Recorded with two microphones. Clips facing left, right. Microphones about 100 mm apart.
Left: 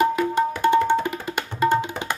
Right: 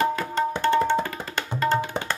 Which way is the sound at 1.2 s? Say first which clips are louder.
Left 3 dB; 15° left (ahead or behind).